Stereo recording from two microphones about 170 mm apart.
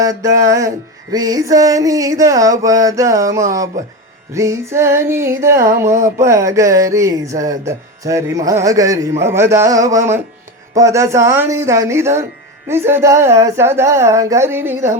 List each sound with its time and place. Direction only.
0.0 s speech: 20° right (ahead or behind)